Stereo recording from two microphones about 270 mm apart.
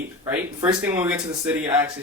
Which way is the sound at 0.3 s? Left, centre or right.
Centre.